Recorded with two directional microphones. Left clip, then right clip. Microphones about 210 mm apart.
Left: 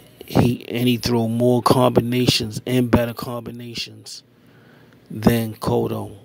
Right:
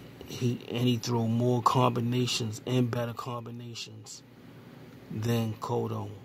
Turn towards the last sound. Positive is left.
turn(degrees=30)  # may be behind; listen again after turning